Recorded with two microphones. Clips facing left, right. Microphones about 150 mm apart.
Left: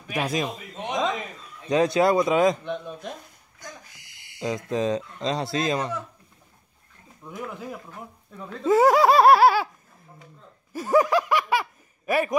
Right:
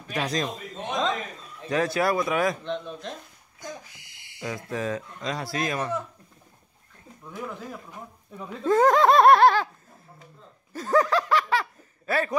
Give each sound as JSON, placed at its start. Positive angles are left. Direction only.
{"t": 0.1, "sound": "a man's voice", "side_deg": 10}
{"t": 4.6, "sound": "a man's voice", "side_deg": 20}
{"t": 7.2, "sound": "laughter", "side_deg": 15}
{"t": 8.6, "sound": "laughter", "side_deg": 5}
{"t": 10.7, "sound": "a sound", "side_deg": 10}
{"t": 12.1, "sound": "laughter", "side_deg": 15}